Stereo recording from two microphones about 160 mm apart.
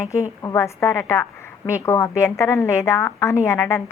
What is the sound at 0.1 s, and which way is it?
A woman's voice, 20° left (ahead or behind).